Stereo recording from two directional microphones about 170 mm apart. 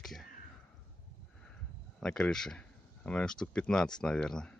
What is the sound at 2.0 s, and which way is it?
Speech, 5° left (ahead or behind).